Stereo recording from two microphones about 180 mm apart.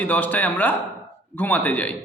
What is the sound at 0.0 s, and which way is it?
A man's voice, 10° left (ahead or behind).